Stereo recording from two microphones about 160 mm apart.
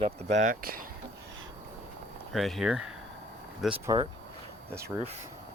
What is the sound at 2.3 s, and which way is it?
Speech, centre (ahead or behind).